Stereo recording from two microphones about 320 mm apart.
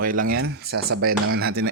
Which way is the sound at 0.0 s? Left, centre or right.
Right.